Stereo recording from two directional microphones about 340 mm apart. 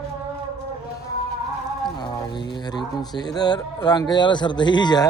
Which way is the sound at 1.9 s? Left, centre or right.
Centre.